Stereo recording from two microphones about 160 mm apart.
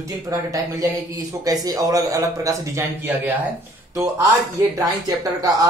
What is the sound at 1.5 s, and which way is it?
Speech, 25° right (ahead or behind).